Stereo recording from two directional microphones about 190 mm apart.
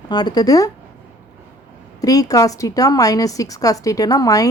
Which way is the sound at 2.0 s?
20° left (ahead or behind).